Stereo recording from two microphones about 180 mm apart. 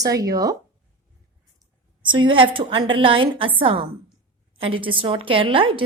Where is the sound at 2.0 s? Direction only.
25° right (ahead or behind).